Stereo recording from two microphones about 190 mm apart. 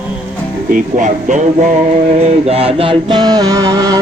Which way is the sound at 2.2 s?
30° right (ahead or behind).